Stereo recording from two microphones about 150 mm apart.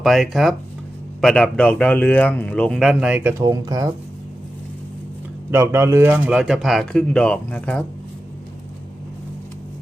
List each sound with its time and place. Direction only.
0.0 s a man's voice: centre (ahead or behind)
3.3 s speech: 25° right (ahead or behind)
5.5 s speech: 20° right (ahead or behind); by 7.9 s 10° left (ahead or behind)